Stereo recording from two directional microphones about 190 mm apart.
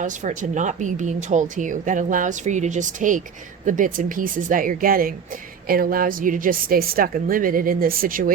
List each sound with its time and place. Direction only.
0.0 s a woman's voice: 40° right (ahead or behind)